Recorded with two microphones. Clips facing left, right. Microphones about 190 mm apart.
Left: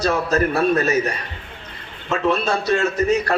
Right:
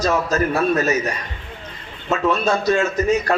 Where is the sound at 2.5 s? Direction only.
35° left (ahead or behind).